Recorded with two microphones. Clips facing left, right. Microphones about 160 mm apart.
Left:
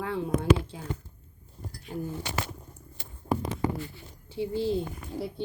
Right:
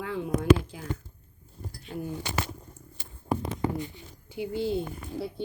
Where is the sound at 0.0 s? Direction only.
35° left (ahead or behind).